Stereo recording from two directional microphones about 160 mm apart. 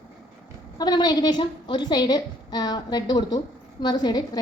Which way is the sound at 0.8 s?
25° left (ahead or behind).